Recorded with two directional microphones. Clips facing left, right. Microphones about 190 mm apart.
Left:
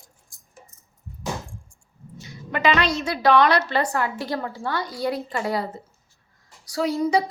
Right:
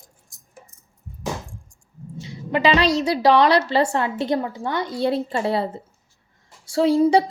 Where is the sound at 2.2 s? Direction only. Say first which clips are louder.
Right 3 dB; 30° right (ahead or behind).